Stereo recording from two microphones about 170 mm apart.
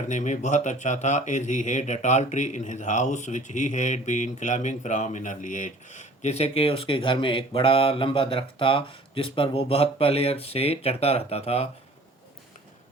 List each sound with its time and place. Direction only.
0.1 s speech: 45° left (ahead or behind)